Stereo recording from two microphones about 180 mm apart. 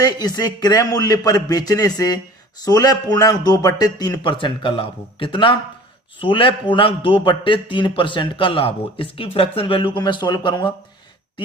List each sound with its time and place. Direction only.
0.0 s a man's voice: 20° left (ahead or behind)